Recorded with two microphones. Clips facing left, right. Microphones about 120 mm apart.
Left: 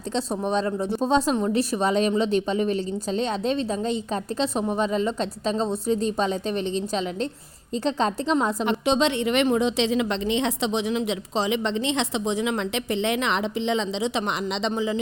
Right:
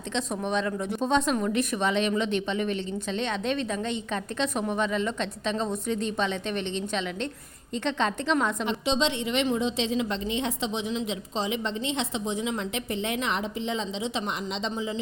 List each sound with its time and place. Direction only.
0.1 s a woman's voice: 35° left (ahead or behind)
8.6 s a woman's voice: 60° left (ahead or behind); by 14.9 s 75° left (ahead or behind)